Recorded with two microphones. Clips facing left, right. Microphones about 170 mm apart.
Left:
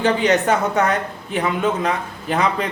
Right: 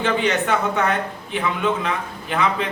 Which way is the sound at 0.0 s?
40° left (ahead or behind).